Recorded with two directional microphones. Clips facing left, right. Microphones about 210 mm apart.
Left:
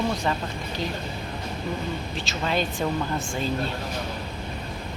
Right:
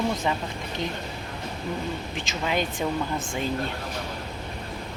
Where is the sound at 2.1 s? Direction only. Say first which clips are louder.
Left 1 dB; 15° right (ahead or behind).